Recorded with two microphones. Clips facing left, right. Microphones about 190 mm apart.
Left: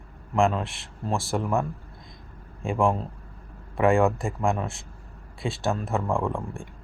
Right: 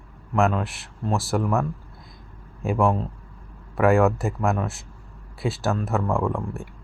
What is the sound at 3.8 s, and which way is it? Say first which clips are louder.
Speech: right 2 dB; 30° left (ahead or behind).